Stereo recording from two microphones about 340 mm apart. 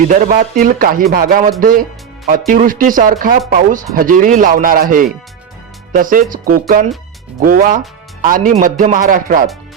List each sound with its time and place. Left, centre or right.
0.1 s speech: right